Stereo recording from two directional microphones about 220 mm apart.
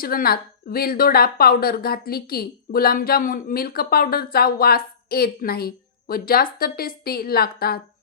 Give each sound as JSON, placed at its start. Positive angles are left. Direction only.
{"t": 0.0, "sound": "a woman's voice", "side_deg": 40}